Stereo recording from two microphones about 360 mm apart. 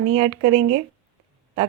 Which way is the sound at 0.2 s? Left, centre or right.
Centre.